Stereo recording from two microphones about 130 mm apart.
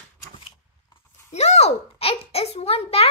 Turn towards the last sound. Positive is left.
turn(degrees=50)  # may be behind; listen again after turning